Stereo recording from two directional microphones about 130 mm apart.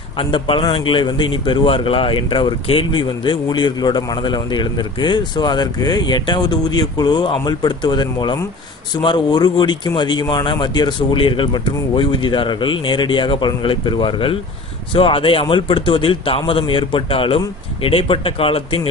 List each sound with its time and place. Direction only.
0.2 s a man's voice: 40° left (ahead or behind)